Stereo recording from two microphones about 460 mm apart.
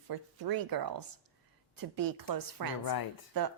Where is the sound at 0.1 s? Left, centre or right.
Right.